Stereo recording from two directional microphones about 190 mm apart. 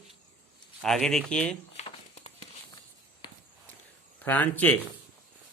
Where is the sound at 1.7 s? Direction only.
35° left (ahead or behind).